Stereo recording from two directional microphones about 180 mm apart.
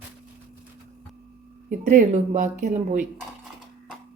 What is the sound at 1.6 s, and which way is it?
Speech, 40° right (ahead or behind).